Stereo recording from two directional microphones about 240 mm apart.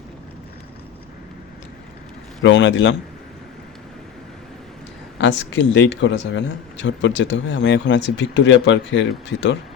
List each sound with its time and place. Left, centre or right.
2.4 s a man's voice: left
5.1 s a man's voice: left